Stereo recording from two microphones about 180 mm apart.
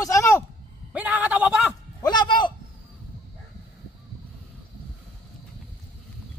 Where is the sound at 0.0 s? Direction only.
15° left (ahead or behind).